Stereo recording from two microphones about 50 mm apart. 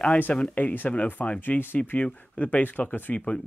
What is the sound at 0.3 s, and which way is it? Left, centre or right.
Speech, left.